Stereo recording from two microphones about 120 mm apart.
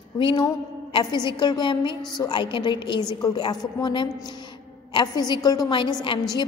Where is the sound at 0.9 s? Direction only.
40° left (ahead or behind).